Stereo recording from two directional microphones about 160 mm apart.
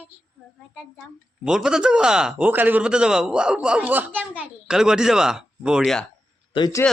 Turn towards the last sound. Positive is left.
turn(degrees=25)  # may be behind; listen again after turning